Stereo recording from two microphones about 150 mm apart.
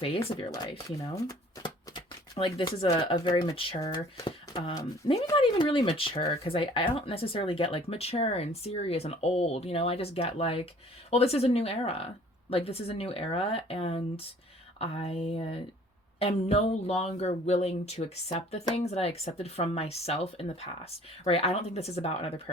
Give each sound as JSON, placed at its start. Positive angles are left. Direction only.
{"t": 0.9, "sound": "speech", "side_deg": 20}
{"t": 1.6, "sound": "a sound", "side_deg": 30}
{"t": 2.9, "sound": "speech", "side_deg": 30}